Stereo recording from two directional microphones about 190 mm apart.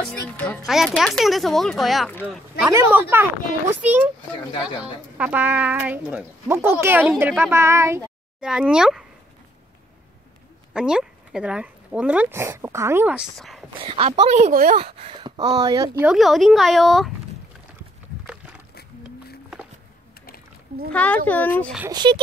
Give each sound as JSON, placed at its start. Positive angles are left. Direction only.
{"t": 0.4, "sound": "music", "side_deg": 10}
{"t": 0.7, "sound": "speech", "side_deg": 0}
{"t": 2.7, "sound": "speech", "side_deg": -10}
{"t": 5.1, "sound": "speech", "side_deg": -5}
{"t": 8.4, "sound": "speech", "side_deg": -5}
{"t": 10.7, "sound": "speech", "side_deg": -5}
{"t": 13.7, "sound": "speech", "side_deg": -30}
{"t": 14.8, "sound": "speech", "side_deg": -30}
{"t": 15.6, "sound": "speech", "side_deg": -20}
{"t": 16.1, "sound": "speech", "side_deg": 0}
{"t": 20.9, "sound": "speech", "side_deg": 5}
{"t": 21.9, "sound": "speech", "side_deg": -25}